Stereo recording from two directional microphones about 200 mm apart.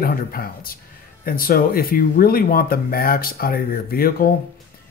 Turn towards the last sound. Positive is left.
turn(degrees=45)  # may be behind; listen again after turning